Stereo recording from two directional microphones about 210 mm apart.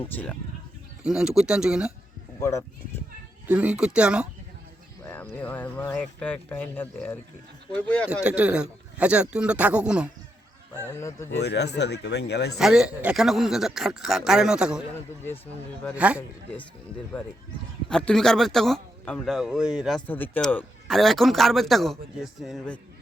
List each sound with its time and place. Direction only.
0.0 s speech: 10° left (ahead or behind)
1.0 s speech: 5° right (ahead or behind)
2.4 s speech: 15° left (ahead or behind)
3.4 s speech: 5° right (ahead or behind)
5.0 s speech: 10° left (ahead or behind)
8.1 s speech: 5° right (ahead or behind)
10.8 s speech: 10° left (ahead or behind)
11.4 s a man's voice: 55° left (ahead or behind)
12.5 s speech: 5° right (ahead or behind)
16.0 s speech: 5° right (ahead or behind)
17.8 s speech: 5° left (ahead or behind)
20.1 s speech: 10° left (ahead or behind)